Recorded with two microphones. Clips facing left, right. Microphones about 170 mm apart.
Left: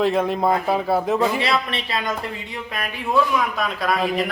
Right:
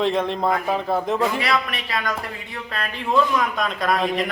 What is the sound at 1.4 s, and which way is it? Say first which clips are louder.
Speech: left 1 dB; 25° left (ahead or behind).